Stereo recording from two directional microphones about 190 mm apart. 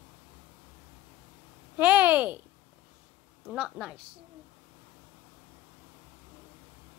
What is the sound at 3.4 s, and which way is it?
Speech, 5° right (ahead or behind).